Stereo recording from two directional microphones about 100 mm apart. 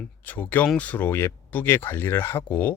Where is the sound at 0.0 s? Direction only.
15° left (ahead or behind).